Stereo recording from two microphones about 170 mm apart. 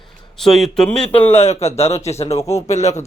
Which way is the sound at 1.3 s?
40° left (ahead or behind).